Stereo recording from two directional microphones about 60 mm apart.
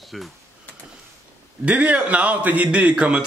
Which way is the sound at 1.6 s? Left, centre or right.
Right.